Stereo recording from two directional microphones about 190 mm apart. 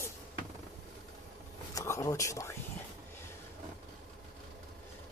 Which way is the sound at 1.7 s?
15° left (ahead or behind).